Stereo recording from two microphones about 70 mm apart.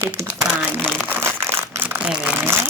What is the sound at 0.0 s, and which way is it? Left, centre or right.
Speech, right.